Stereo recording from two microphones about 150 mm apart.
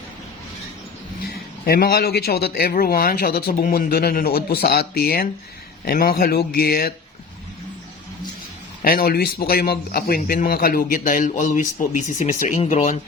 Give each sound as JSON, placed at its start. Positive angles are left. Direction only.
{"t": 1.3, "sound": "a man's voice", "side_deg": 90}
{"t": 8.8, "sound": "speech", "side_deg": 80}